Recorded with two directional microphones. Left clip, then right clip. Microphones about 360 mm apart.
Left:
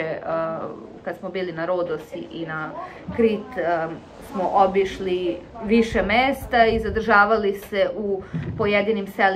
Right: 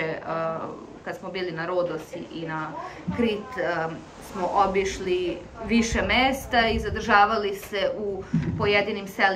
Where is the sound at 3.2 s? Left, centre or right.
Centre.